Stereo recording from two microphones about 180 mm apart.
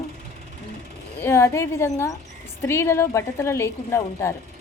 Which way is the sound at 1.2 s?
15° left (ahead or behind).